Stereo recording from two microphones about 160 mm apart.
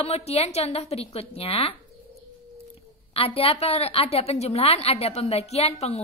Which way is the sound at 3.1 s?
35° left (ahead or behind).